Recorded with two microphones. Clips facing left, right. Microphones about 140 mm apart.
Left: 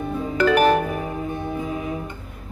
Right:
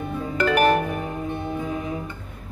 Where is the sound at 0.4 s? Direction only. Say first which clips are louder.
Left 2 dB; 90° left.